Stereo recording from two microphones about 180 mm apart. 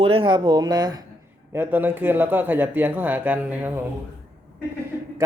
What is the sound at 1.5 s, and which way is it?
Speech, 10° right (ahead or behind).